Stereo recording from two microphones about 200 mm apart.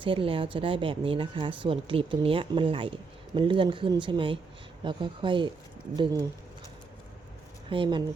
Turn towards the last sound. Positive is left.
turn(degrees=-25)  # may be behind; listen again after turning